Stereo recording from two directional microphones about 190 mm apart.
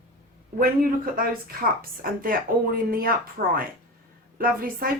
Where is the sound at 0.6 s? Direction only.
50° right (ahead or behind).